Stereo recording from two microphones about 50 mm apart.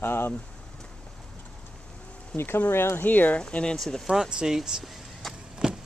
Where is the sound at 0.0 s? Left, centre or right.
Left.